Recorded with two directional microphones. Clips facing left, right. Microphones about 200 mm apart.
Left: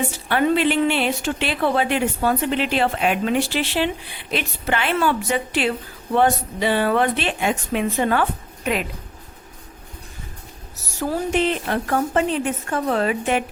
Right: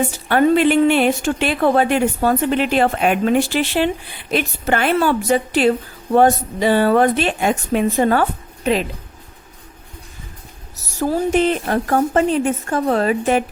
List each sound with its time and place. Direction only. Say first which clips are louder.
0.3 s a woman's voice: right 5 dB; 45° right (ahead or behind); by 8.9 s 30° right (ahead or behind)
11.3 s speech: right 3 dB; 45° right (ahead or behind)